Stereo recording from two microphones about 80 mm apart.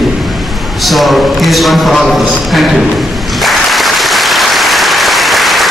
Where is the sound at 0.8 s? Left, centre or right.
Centre.